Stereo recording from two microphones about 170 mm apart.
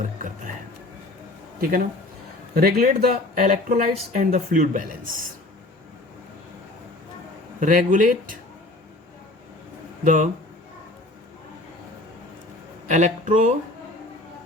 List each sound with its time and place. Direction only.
0.0 s music: 50° right (ahead or behind)
2.6 s speech: 65° right (ahead or behind)
7.6 s speech: 50° right (ahead or behind)
10.0 s speech: 50° right (ahead or behind)
12.9 s speech: 45° right (ahead or behind)